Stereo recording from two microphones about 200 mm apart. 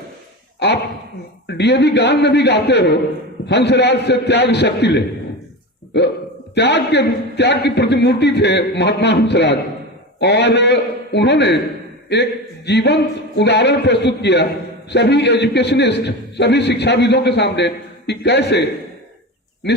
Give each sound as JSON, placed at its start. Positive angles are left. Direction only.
{"t": 1.5, "sound": "a man's voice", "side_deg": 60}
{"t": 6.5, "sound": "a man's voice", "side_deg": 60}